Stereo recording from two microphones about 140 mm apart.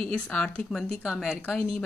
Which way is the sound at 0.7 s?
Centre (ahead or behind).